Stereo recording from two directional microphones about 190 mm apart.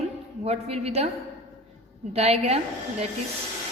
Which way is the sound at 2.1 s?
35° right (ahead or behind).